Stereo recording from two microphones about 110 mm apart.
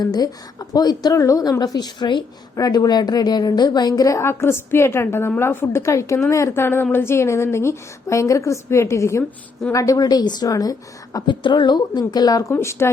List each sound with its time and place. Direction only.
0.0 s a woman's voice: 35° left (ahead or behind)